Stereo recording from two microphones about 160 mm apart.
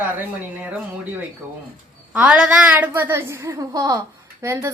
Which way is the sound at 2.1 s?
5° right (ahead or behind).